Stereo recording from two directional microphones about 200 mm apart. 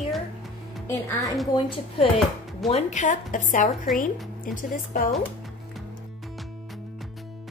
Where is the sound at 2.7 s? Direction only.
35° left (ahead or behind).